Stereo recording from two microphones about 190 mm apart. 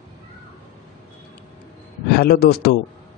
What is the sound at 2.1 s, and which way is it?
Speech, 55° left (ahead or behind).